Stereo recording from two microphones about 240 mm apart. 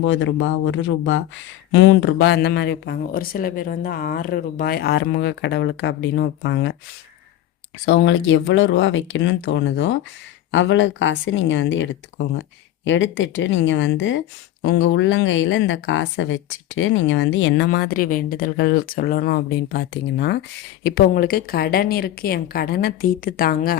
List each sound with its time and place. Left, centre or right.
0.0 s speech: left
7.9 s speech: left
17.7 s a woman's voice: left